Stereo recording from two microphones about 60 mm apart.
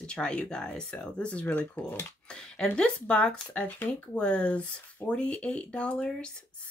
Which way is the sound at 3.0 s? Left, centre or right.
Centre.